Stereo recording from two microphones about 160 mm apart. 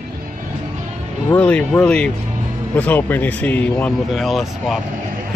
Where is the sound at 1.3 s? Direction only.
10° left (ahead or behind).